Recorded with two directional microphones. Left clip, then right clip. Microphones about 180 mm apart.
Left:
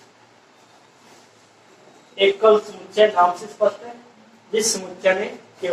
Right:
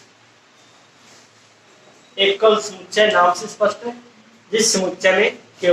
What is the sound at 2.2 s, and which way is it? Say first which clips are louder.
Speech: even; 15° right (ahead or behind).